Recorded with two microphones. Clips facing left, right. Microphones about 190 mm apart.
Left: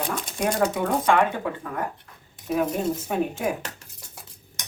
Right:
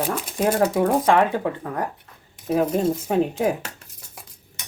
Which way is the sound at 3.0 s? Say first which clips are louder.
Right 5 dB; 35° right (ahead or behind).